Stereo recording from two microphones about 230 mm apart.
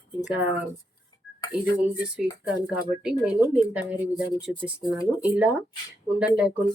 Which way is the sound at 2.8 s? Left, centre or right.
Centre.